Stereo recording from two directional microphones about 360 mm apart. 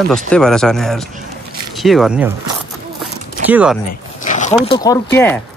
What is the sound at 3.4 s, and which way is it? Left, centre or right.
Speech, centre.